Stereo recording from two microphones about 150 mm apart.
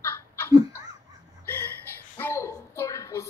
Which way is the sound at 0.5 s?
20° right (ahead or behind).